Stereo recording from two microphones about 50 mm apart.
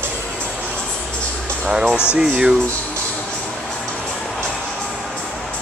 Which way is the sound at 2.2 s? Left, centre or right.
Centre.